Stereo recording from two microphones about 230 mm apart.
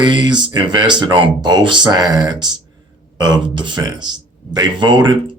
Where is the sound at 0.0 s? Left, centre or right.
Centre.